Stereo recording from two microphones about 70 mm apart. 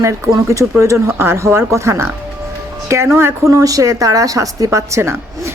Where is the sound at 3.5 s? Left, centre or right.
Right.